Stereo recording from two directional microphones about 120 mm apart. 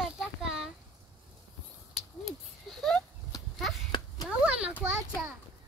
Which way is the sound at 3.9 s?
40° left (ahead or behind).